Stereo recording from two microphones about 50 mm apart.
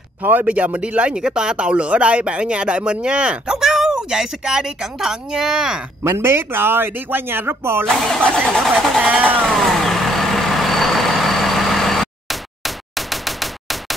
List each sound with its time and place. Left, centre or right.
0.2 s speech: right
0.5 s speech: right
3.5 s speech: centre
6.0 s speech: right
8.2 s speech: centre
9.0 s speech: right
9.4 s vehicle: centre